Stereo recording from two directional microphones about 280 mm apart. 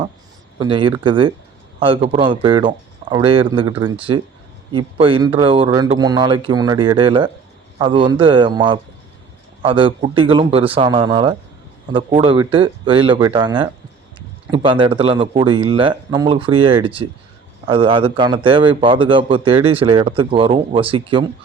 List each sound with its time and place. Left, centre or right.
0.6 s a man's voice: centre